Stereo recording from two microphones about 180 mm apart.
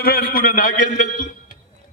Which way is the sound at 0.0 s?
55° left (ahead or behind).